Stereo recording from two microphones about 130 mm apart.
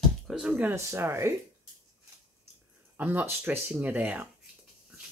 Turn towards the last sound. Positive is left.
turn(degrees=-10)  # may be behind; listen again after turning